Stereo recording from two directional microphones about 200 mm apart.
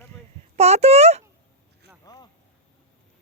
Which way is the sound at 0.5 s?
30° right (ahead or behind).